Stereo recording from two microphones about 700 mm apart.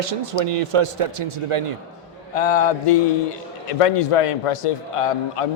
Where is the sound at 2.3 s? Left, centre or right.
Left.